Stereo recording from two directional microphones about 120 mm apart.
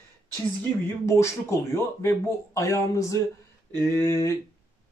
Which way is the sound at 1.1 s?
25° left (ahead or behind).